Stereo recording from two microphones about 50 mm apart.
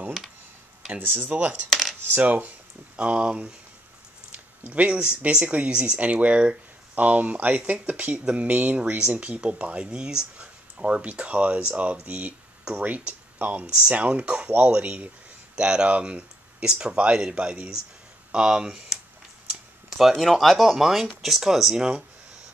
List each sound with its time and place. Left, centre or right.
0.9 s speech: right
1.3 s speech: right
1.7 s coin: centre
2.0 s coin: right
3.0 s speech: right
4.3 s a sound: right
5.2 s speech: right
19.5 s speech: centre